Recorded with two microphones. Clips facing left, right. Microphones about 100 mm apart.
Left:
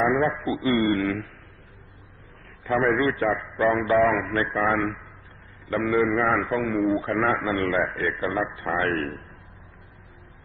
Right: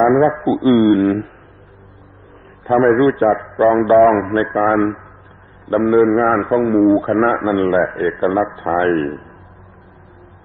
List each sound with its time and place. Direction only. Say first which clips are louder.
0.0 s a man's voice: right 10 dB; 40° right (ahead or behind)
2.6 s a man's voice: right 10 dB; 35° right (ahead or behind)